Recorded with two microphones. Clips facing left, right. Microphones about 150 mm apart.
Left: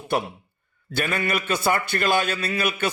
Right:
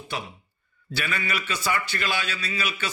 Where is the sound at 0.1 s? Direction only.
55° left (ahead or behind).